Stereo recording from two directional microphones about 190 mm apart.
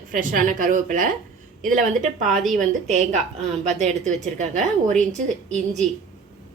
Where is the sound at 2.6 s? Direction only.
35° right (ahead or behind).